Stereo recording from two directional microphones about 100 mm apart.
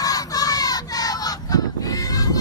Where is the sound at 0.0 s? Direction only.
40° left (ahead or behind).